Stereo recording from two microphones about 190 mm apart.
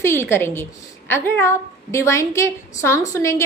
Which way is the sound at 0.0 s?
15° left (ahead or behind).